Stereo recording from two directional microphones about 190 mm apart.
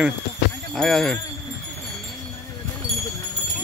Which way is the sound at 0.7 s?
Centre (ahead or behind).